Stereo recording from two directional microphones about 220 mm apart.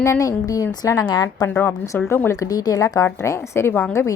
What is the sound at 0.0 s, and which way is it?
A woman's voice, 15° left (ahead or behind).